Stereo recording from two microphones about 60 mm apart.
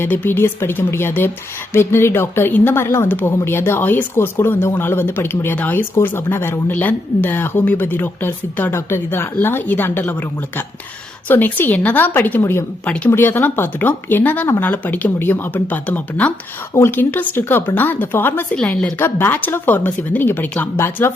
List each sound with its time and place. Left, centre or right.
0.1 s speech: left
6.7 s speech: left
11.3 s speech: left
12.8 s speech: left
13.1 s speech: left
19.0 s speech: left
20.7 s speech: left